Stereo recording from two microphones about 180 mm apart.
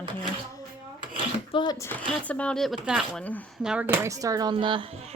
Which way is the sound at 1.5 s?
20° left (ahead or behind).